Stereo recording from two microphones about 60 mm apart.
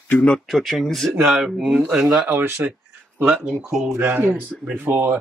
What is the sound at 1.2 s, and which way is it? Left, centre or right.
Speech, centre.